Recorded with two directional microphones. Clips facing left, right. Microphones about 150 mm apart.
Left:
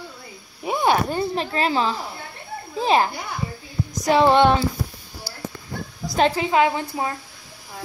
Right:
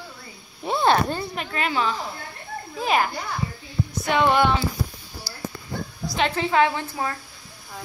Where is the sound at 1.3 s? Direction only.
30° left (ahead or behind).